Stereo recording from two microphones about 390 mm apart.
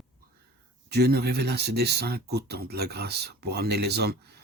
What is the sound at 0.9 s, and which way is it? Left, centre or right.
Speech, right.